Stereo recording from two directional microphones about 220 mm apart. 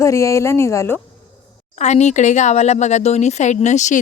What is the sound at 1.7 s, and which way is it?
Speech, 30° left (ahead or behind).